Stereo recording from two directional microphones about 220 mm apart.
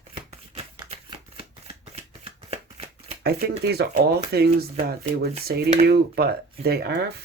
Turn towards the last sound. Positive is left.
turn(degrees=-45)  # may be behind; listen again after turning